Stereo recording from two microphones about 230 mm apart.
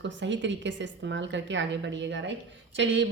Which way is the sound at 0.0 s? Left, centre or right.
Right.